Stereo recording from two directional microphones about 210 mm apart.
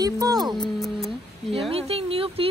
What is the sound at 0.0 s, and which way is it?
Music, 20° right (ahead or behind).